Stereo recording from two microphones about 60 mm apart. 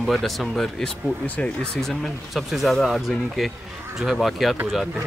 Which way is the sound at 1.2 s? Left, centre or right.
Left.